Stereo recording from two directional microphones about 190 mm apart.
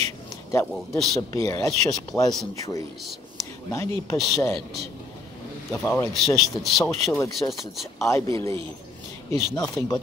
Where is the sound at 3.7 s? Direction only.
20° left (ahead or behind).